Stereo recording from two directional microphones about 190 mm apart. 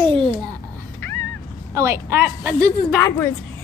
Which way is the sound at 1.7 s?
15° right (ahead or behind).